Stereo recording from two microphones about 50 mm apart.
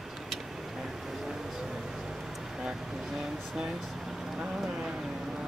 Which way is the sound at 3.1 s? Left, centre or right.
Centre.